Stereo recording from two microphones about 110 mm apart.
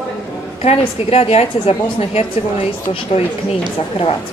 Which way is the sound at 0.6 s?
70° left (ahead or behind).